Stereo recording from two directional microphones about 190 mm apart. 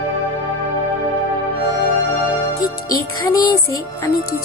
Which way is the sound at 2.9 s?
20° left (ahead or behind).